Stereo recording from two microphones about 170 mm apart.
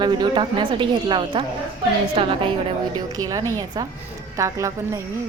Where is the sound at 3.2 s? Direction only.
20° right (ahead or behind).